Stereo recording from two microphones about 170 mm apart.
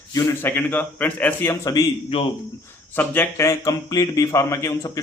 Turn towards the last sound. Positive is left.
turn(degrees=20)  # may be behind; listen again after turning